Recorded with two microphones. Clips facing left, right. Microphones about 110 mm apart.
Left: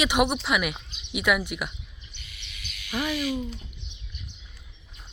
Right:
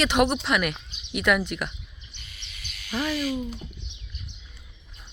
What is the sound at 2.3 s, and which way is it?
Frog, 35° right (ahead or behind).